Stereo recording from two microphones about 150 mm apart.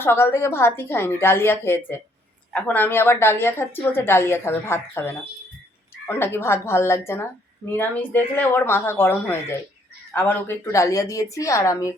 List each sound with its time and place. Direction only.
0.0 s a woman's voice: 15° left (ahead or behind)